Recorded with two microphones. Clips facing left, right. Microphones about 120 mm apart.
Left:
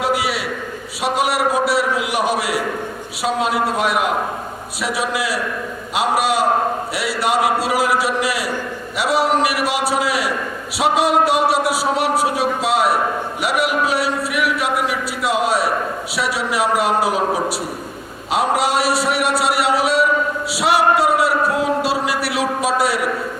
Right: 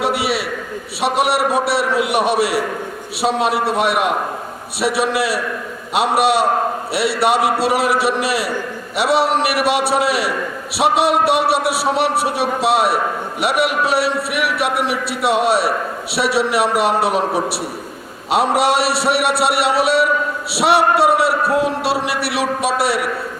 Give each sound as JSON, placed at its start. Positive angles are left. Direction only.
{"t": 0.0, "sound": "a sound", "side_deg": -65}
{"t": 1.5, "sound": "a man's voice", "side_deg": -65}
{"t": 5.1, "sound": "a man's voice", "side_deg": -65}
{"t": 18.3, "sound": "a man's voice", "side_deg": -70}